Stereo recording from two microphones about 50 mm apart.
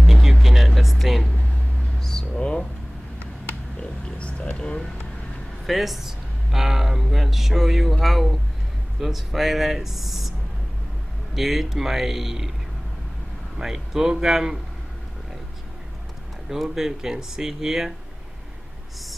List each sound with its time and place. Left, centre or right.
0.0 s music: centre
2.0 s a sound: centre
4.2 s speech: left
5.7 s speech: centre
11.3 s speech: centre
13.6 s speech: centre
16.4 s speech: centre